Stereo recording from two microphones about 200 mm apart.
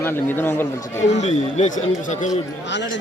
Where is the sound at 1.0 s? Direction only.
60° left (ahead or behind).